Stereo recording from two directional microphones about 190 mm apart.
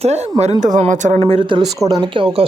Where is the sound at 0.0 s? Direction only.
35° right (ahead or behind).